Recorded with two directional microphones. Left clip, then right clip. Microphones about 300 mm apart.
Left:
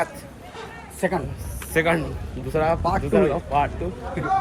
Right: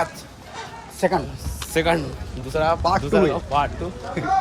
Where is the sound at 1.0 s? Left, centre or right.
Right.